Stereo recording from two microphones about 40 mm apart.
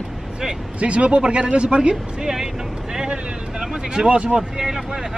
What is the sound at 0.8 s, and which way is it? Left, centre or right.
Speech, right.